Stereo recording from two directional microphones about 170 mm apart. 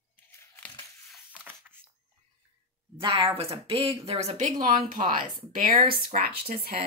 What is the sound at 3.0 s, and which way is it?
A woman's voice, 30° right (ahead or behind).